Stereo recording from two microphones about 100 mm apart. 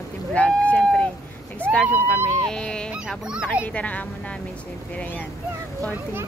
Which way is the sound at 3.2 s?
10° right (ahead or behind).